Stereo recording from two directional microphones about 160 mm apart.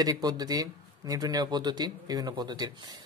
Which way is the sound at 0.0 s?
25° right (ahead or behind).